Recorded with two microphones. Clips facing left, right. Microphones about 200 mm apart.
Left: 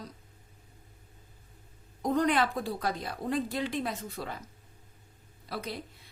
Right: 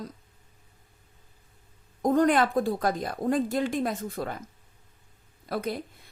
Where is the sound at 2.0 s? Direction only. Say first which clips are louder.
Right 5 dB; 45° right (ahead or behind).